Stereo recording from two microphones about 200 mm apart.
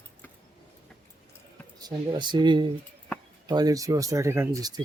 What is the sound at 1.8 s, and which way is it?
Speech, 20° right (ahead or behind).